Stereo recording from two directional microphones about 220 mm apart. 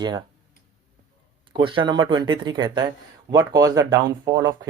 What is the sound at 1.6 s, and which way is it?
Speech, 20° right (ahead or behind).